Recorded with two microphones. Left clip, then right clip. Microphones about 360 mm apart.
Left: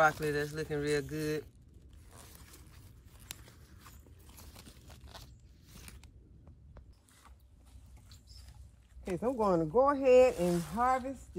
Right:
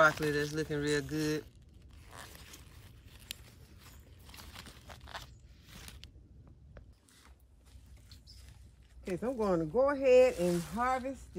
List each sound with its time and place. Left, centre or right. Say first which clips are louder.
0.0 s speech: right 1 dB; centre
2.0 s a sound: right 6 dB; centre
9.0 s speech: left 2 dB; centre
10.3 s speech: even; centre